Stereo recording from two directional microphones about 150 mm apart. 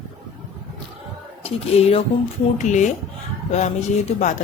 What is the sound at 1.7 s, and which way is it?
Speech, 45° left (ahead or behind).